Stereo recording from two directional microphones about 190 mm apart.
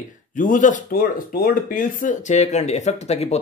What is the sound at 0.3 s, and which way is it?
Speech, 45° left (ahead or behind).